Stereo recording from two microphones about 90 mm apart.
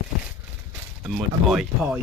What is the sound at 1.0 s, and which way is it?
Speech, 10° right (ahead or behind).